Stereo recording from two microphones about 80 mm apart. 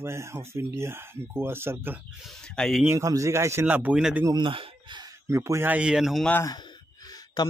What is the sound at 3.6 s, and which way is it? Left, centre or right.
Speech, right.